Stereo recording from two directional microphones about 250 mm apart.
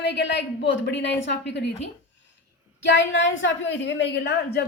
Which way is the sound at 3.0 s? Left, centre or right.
Left.